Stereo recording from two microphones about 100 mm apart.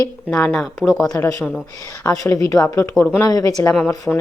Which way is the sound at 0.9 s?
40° left (ahead or behind).